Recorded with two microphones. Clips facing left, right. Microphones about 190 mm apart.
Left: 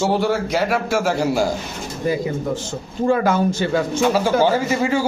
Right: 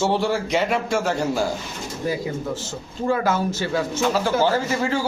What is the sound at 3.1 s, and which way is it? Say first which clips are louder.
Speech: left 4 dB; 5° right (ahead or behind).